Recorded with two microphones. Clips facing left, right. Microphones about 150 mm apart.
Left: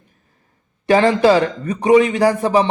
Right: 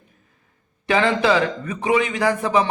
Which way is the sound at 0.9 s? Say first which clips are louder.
Left 6 dB; 40° left (ahead or behind).